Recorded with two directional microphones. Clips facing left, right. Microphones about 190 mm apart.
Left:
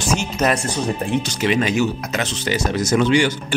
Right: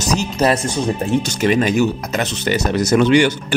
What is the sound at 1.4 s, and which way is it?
Speech, 45° right (ahead or behind).